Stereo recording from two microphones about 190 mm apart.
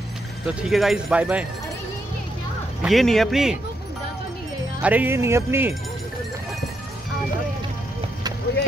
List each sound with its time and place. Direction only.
0.5 s speech: 5° right (ahead or behind)
2.8 s speech: centre (ahead or behind)
4.8 s speech: 10° right (ahead or behind)